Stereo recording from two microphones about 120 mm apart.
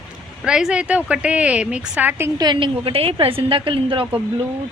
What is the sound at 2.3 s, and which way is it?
Speech, 35° right (ahead or behind).